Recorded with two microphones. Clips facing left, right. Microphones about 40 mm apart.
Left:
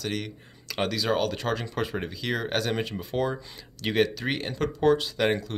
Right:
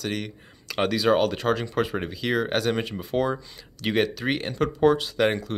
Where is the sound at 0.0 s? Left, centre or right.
Centre.